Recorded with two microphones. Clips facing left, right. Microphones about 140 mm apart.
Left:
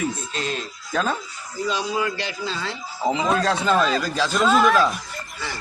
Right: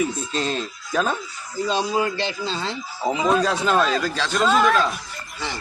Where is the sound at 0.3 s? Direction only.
30° right (ahead or behind).